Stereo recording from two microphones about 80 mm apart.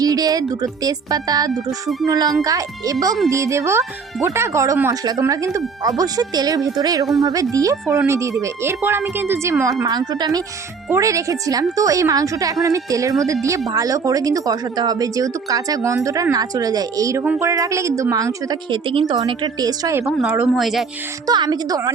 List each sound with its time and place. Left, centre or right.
0.0 s speech: right
1.5 s speech: centre
2.0 s a woman's voice: right
6.0 s a woman's voice: right
7.5 s speech: right
8.8 s a woman's voice: right
9.8 s a woman's voice: right
10.9 s a woman's voice: right
18.7 s speech: right
19.3 s a woman's voice: right
20.1 s speech: centre
21.2 s a woman's voice: right